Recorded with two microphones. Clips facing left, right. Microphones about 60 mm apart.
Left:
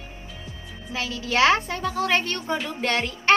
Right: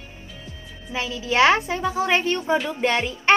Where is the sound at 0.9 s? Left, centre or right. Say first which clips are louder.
Right 2 dB; centre.